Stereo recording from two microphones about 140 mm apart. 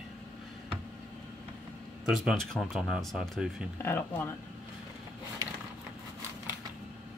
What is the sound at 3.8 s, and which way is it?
Speech, 15° left (ahead or behind).